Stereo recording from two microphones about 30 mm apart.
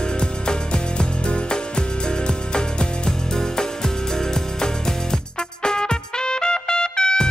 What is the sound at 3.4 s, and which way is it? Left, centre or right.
Music, centre.